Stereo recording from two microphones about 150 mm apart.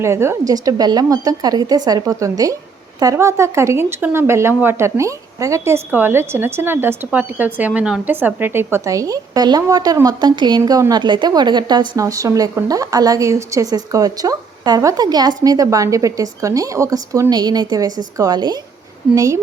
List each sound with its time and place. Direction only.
0.0 s speech: 15° right (ahead or behind)